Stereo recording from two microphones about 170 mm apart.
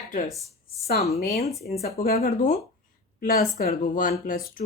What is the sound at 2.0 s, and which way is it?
A woman's voice, 60° left (ahead or behind).